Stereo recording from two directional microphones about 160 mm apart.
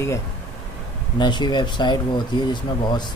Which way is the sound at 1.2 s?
25° left (ahead or behind).